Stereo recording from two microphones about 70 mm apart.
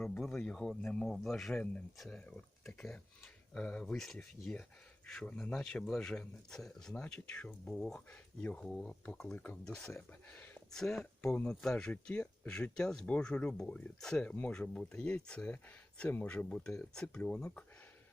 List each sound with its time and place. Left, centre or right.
0.3 s speech: centre
0.7 s speech: centre
10.2 s a sound: centre
10.8 s speech: centre
14.3 s speech: left